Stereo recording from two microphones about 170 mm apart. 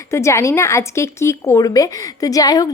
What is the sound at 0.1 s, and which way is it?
A woman's voice, 15° left (ahead or behind).